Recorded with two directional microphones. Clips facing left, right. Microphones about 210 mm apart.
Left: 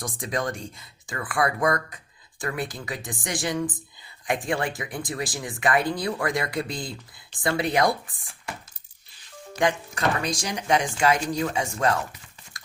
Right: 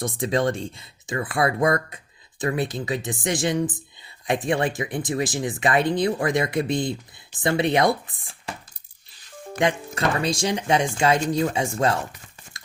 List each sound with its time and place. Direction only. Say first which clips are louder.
0.0 s speech: right 6 dB; 25° right (ahead or behind)
9.6 s speech: right 2 dB; 25° right (ahead or behind)
12.5 s biting: right 1 dB; 25° right (ahead or behind)